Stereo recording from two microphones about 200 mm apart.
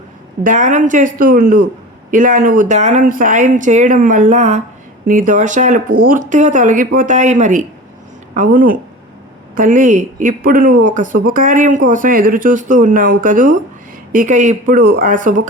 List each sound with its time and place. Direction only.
0.4 s speech: 40° right (ahead or behind)